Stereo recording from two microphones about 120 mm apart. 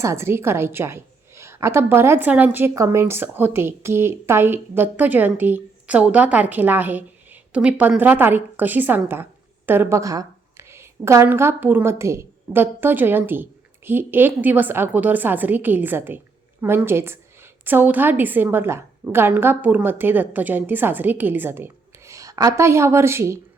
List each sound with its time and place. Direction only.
0.0 s a woman's voice: 20° right (ahead or behind)